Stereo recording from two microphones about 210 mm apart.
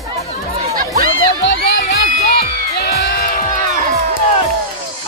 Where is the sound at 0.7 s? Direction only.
45° right (ahead or behind).